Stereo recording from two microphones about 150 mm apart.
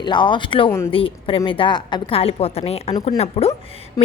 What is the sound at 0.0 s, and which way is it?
A woman's voice, 30° left (ahead or behind).